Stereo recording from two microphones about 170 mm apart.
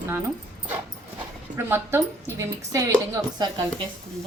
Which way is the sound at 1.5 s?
15° right (ahead or behind).